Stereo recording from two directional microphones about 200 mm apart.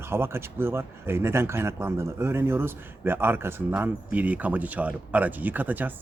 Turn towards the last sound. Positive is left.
turn(degrees=-10)  # may be behind; listen again after turning